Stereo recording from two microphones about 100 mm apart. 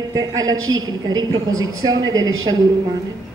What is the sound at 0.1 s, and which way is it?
A woman's voice, 35° right (ahead or behind).